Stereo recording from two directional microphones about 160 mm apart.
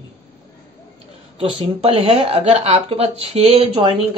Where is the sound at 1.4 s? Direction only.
35° right (ahead or behind).